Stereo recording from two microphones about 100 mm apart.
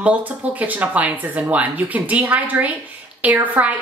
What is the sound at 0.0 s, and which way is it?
A woman's voice, 15° right (ahead or behind).